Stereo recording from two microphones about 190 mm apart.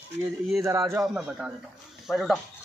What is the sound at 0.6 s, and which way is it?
Speech, 15° right (ahead or behind).